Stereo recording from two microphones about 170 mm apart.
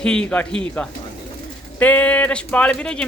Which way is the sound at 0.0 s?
5° left (ahead or behind).